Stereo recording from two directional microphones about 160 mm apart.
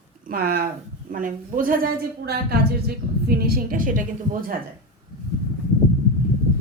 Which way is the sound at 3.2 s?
65° right (ahead or behind).